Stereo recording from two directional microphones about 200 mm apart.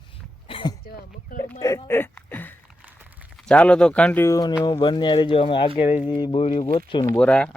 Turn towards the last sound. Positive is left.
turn(degrees=5)  # may be behind; listen again after turning